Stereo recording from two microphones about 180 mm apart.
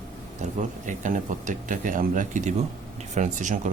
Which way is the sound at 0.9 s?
45° right (ahead or behind).